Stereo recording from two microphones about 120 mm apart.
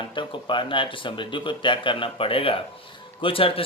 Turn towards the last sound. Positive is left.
turn(degrees=50)  # may be behind; listen again after turning